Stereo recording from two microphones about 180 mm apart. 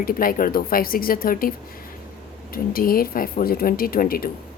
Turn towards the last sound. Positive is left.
turn(degrees=55)  # may be behind; listen again after turning